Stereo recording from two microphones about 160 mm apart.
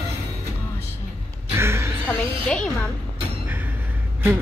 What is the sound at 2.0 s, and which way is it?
Music, 5° left (ahead or behind).